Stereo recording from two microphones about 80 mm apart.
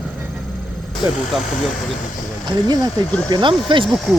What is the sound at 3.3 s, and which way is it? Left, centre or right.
Speech, right.